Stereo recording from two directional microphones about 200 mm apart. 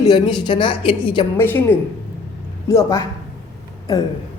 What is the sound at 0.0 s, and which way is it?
A woman's voice, 20° left (ahead or behind).